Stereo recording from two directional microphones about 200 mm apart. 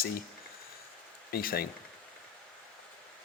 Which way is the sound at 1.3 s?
50° left (ahead or behind).